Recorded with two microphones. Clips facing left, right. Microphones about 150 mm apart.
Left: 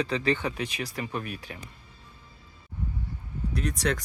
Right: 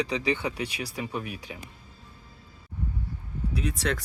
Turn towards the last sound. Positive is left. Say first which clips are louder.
# left 1 dB
turn(degrees=-5)  # may be behind; listen again after turning